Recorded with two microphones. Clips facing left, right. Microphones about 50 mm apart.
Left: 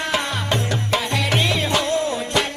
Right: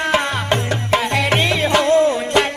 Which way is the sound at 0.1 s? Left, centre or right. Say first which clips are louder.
Right 4 dB; right.